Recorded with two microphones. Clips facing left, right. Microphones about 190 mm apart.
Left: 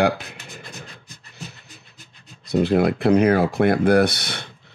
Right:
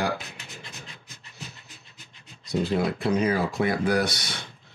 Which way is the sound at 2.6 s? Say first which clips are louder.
Left 8 dB; 65° left (ahead or behind).